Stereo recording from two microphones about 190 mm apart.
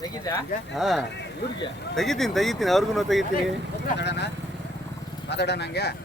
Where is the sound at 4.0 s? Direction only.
65° left (ahead or behind).